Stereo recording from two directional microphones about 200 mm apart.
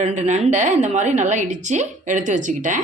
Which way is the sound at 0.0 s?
35° right (ahead or behind).